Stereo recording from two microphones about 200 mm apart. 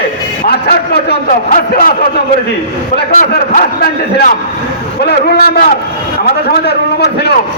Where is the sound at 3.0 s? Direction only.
40° left (ahead or behind).